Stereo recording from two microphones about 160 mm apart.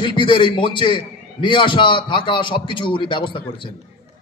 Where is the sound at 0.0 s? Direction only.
30° left (ahead or behind).